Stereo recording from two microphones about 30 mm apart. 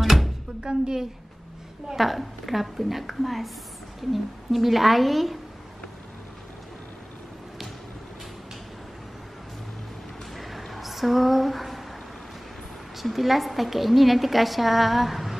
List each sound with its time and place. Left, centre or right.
0.0 s music: centre
0.6 s a woman's voice: right
2.0 s a woman's voice: centre
10.3 s a sound: centre
12.9 s a woman's voice: centre